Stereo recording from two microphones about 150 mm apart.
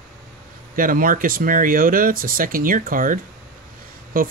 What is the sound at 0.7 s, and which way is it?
Speech, 70° right (ahead or behind).